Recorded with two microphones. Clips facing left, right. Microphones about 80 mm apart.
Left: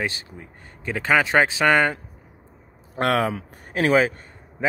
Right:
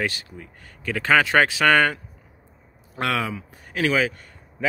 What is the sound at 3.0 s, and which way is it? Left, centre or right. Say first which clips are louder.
A man's voice: left 4 dB; left.